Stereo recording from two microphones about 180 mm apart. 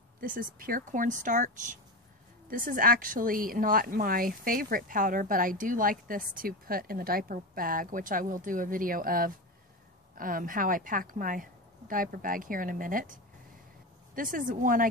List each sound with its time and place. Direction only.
0.2 s a woman's voice: 50° right (ahead or behind)